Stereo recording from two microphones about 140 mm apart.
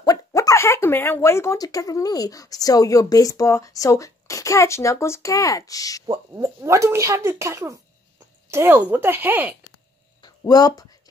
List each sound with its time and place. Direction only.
0.0 s speech: 25° left (ahead or behind)
6.0 s speech: 20° right (ahead or behind)
10.2 s a sound: 25° left (ahead or behind)